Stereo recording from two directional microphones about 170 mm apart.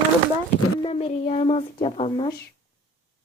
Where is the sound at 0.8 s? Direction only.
35° left (ahead or behind).